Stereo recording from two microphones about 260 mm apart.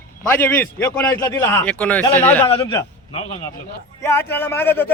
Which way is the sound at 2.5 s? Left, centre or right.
Left.